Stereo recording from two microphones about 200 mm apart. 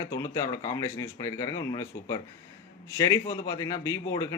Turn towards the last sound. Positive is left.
turn(degrees=20)  # may be behind; listen again after turning